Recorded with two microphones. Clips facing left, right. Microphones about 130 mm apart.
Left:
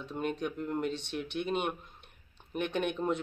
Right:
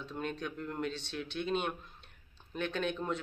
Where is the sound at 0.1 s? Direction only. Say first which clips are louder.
Left 5 dB; 15° left (ahead or behind).